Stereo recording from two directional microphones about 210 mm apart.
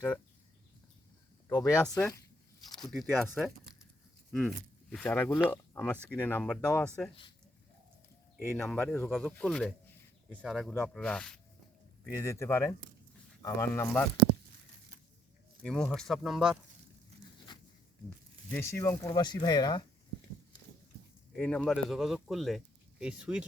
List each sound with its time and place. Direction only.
1.5 s speech: 20° left (ahead or behind)
1.7 s speech: 10° left (ahead or behind)
2.8 s speech: centre (ahead or behind)
8.4 s speech: centre (ahead or behind)
15.6 s speech: 5° left (ahead or behind)
18.5 s speech: 10° left (ahead or behind)
21.3 s speech: 5° left (ahead or behind)